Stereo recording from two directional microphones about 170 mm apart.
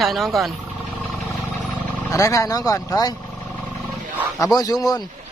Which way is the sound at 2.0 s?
20° left (ahead or behind).